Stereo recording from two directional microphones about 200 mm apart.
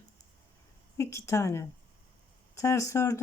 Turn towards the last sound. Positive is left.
turn(degrees=15)  # may be behind; listen again after turning